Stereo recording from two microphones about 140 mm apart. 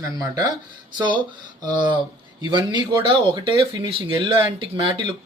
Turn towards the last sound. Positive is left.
turn(degrees=-35)  # may be behind; listen again after turning